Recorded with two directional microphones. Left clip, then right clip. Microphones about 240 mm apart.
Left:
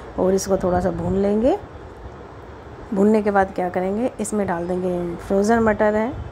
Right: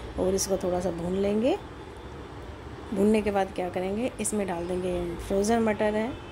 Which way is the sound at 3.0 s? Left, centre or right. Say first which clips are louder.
Left 7 dB; centre.